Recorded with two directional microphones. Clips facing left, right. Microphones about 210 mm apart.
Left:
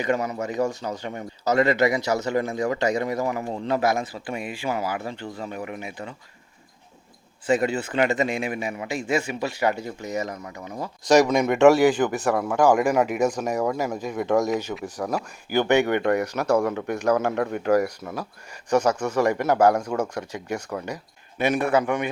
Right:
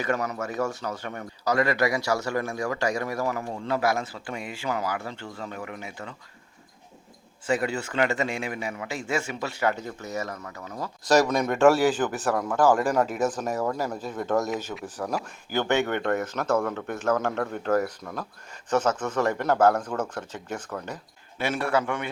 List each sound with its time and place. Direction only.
0.0 s a man's voice: 15° left (ahead or behind)
7.4 s a man's voice: 20° left (ahead or behind)
14.5 s speech: centre (ahead or behind)
15.1 s a man's voice: 10° left (ahead or behind)